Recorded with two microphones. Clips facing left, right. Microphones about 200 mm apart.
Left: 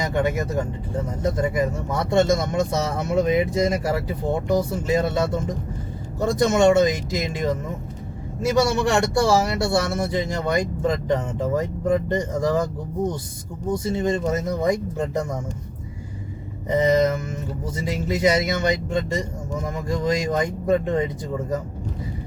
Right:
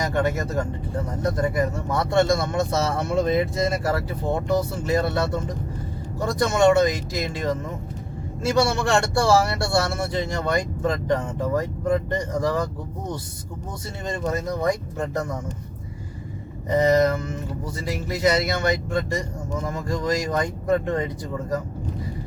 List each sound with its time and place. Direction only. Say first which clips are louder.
0.0 s speech: left 1 dB; 15° left (ahead or behind)
13.8 s speech: left 4 dB; 20° left (ahead or behind)
16.7 s speech: even; 15° left (ahead or behind)